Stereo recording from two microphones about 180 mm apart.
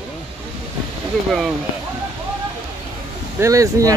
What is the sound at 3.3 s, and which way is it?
Speech, 15° right (ahead or behind).